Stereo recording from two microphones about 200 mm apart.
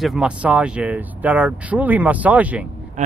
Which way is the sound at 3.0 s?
40° right (ahead or behind).